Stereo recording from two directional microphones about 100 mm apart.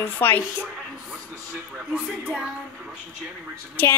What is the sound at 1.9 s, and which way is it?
Speech, 10° right (ahead or behind).